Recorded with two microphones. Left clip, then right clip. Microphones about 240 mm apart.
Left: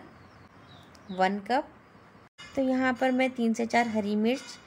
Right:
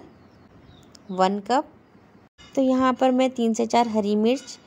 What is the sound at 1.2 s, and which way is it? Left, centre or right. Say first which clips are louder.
A woman's voice: right 5 dB; centre.